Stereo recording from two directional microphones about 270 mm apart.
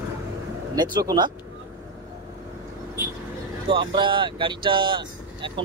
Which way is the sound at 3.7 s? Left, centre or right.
Centre.